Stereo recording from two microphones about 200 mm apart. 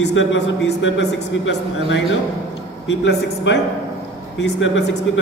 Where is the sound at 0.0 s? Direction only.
70° left (ahead or behind).